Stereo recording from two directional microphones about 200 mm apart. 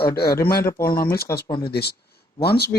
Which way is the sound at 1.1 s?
50° left (ahead or behind).